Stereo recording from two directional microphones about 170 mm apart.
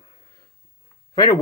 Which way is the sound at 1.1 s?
20° left (ahead or behind).